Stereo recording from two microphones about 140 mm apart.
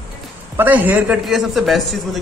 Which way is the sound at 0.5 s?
15° right (ahead or behind).